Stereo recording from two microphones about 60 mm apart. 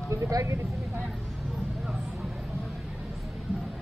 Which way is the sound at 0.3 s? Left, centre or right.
Right.